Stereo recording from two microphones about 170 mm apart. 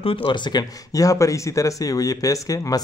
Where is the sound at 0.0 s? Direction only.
30° left (ahead or behind).